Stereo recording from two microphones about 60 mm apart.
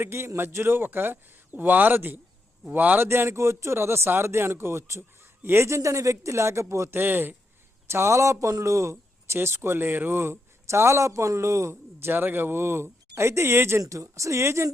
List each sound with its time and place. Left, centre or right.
0.0 s a man's voice: right
3.1 s a man's voice: right
5.6 s speech: right
6.9 s a man's voice: right
7.9 s a man's voice: right
10.2 s a man's voice: right
13.8 s speech: right